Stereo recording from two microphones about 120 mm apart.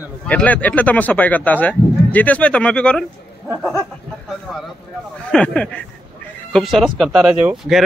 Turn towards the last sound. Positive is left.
turn(degrees=-5)  # may be behind; listen again after turning